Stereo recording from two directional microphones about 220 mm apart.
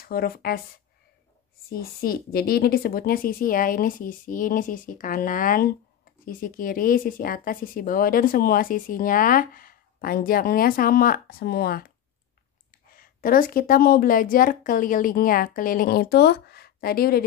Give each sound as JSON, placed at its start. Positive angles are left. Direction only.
{"t": 0.0, "sound": "speech", "side_deg": 45}
{"t": 1.7, "sound": "speech", "side_deg": 45}
{"t": 12.9, "sound": "speech", "side_deg": 40}